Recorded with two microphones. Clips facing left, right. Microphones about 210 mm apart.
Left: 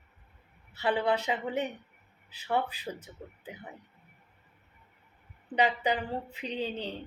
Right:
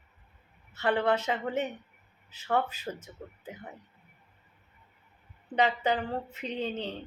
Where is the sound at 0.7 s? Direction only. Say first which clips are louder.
Right 1 dB; 15° left (ahead or behind).